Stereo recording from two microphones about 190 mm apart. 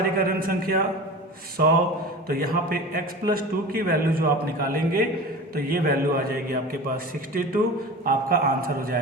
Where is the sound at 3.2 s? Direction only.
50° right (ahead or behind).